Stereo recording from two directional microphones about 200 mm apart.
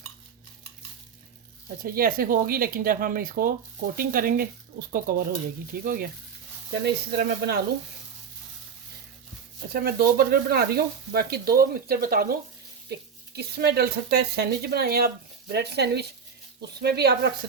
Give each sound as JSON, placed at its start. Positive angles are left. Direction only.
{"t": 1.8, "sound": "speech", "side_deg": -45}
{"t": 9.7, "sound": "speech", "side_deg": -50}